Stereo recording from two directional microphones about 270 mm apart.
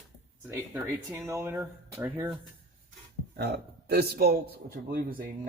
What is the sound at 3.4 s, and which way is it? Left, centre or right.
A man's voice, right.